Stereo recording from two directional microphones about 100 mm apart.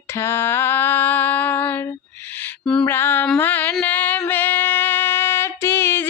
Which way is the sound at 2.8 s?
20° left (ahead or behind).